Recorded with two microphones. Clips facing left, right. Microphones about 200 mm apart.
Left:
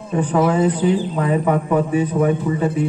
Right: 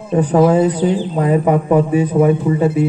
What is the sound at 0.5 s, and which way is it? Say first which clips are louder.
A man's voice: right 3 dB; 40° right (ahead or behind).